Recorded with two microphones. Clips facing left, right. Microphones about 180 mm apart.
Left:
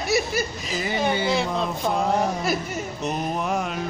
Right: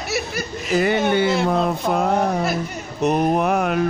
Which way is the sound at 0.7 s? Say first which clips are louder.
Right 13 dB; 60° right (ahead or behind).